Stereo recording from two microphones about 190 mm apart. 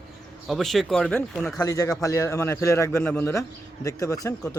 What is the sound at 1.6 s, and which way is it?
A man's voice, 20° left (ahead or behind).